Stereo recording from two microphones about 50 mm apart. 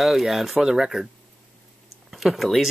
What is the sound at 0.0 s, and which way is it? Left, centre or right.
Speech, centre.